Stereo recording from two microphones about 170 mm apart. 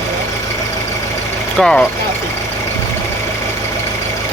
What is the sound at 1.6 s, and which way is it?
Speech, 5° left (ahead or behind).